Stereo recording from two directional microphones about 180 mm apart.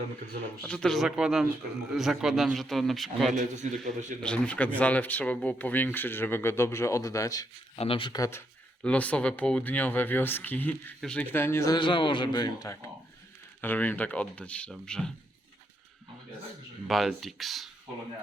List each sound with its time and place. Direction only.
0.6 s a man's voice: 5° left (ahead or behind)
3.3 s a man's voice: 40° right (ahead or behind)
4.2 s speech: 5° left (ahead or behind)
7.8 s speech: 30° left (ahead or behind)
13.6 s speech: 10° left (ahead or behind)
16.8 s a man's voice: centre (ahead or behind)